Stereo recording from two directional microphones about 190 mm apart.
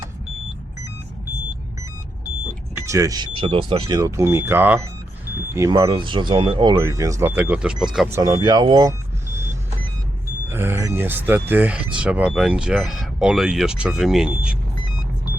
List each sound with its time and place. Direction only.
2.7 s speech: 15° right (ahead or behind)
10.5 s speech: 10° right (ahead or behind)